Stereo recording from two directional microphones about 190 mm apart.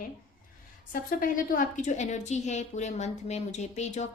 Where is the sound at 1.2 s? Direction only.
45° left (ahead or behind).